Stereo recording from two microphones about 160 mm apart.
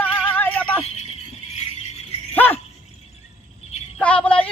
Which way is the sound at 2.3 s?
10° left (ahead or behind).